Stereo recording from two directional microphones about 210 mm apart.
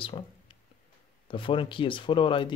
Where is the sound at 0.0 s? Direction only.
25° left (ahead or behind).